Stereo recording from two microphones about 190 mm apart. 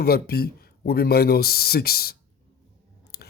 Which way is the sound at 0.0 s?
55° left (ahead or behind).